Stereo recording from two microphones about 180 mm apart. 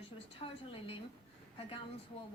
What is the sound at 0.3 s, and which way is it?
Speech, 30° left (ahead or behind).